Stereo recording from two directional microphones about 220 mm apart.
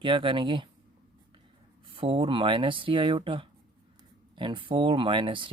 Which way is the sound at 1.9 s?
25° right (ahead or behind).